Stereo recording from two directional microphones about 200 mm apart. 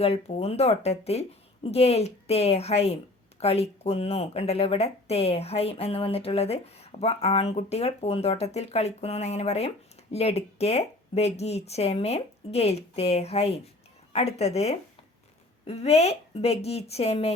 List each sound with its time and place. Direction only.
0.0 s speech: 30° left (ahead or behind)